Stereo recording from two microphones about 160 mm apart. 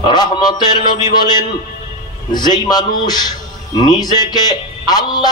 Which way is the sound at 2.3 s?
25° left (ahead or behind).